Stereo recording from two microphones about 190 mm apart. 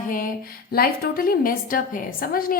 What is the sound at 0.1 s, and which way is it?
A woman's voice, 50° left (ahead or behind).